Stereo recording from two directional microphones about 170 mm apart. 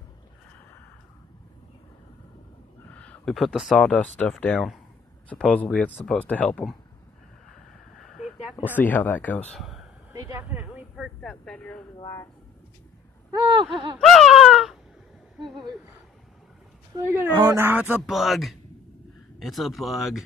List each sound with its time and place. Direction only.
2.9 s speech: 10° left (ahead or behind)
8.2 s a sound: 5° right (ahead or behind)
8.6 s speech: 10° left (ahead or behind)
9.5 s speech: centre (ahead or behind)
10.1 s a sound: 20° right (ahead or behind)
11.1 s speech: 5° left (ahead or behind)
12.0 s speech: 20° left (ahead or behind)
13.3 s a sound: 25° right (ahead or behind)
13.9 s baby cry: centre (ahead or behind)
16.9 s speech: 15° right (ahead or behind)